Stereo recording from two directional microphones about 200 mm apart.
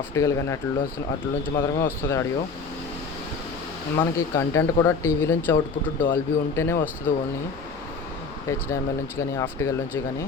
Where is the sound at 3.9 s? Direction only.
15° left (ahead or behind).